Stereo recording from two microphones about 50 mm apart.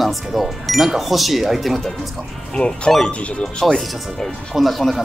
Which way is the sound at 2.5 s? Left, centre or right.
Centre.